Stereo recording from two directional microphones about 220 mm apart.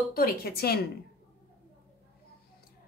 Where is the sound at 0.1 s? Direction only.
45° left (ahead or behind).